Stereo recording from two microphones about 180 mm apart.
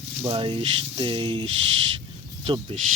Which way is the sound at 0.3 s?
30° right (ahead or behind).